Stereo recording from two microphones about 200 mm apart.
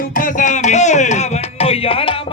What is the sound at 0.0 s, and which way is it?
Music, 45° left (ahead or behind).